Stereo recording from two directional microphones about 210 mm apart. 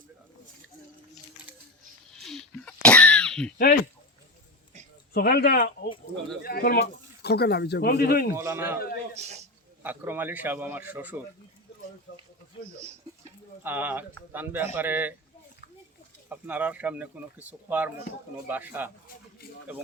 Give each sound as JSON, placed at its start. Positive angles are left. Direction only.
{"t": 2.2, "sound": "throat clearing", "side_deg": 0}
{"t": 5.1, "sound": "speech", "side_deg": 45}
{"t": 8.4, "sound": "a man's voice", "side_deg": -10}
{"t": 9.1, "sound": "a man's voice", "side_deg": -30}
{"t": 9.8, "sound": "a man's voice", "side_deg": -10}
{"t": 12.1, "sound": "speech", "side_deg": 55}
{"t": 13.7, "sound": "a man's voice", "side_deg": -10}
{"t": 16.3, "sound": "a man's voice", "side_deg": -5}